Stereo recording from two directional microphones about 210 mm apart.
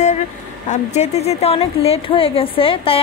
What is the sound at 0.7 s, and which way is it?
A woman's voice, 30° left (ahead or behind).